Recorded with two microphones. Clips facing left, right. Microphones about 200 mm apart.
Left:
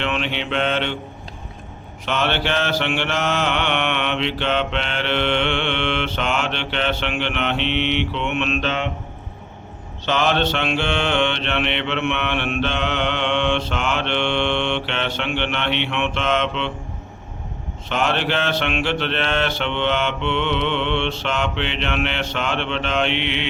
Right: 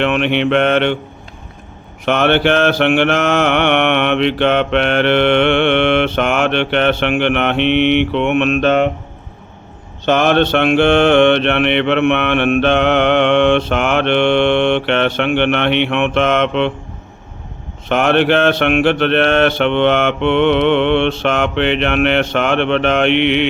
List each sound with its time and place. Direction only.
0.0 s mantra: 60° right (ahead or behind)
2.0 s mantra: 60° right (ahead or behind)
10.1 s mantra: 55° right (ahead or behind)
17.8 s mantra: 60° right (ahead or behind)